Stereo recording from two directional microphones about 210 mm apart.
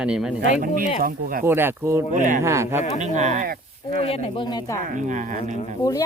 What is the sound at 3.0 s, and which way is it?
Speech, 35° right (ahead or behind).